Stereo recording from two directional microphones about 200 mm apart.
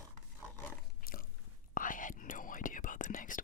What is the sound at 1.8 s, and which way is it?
Whispering, 40° left (ahead or behind).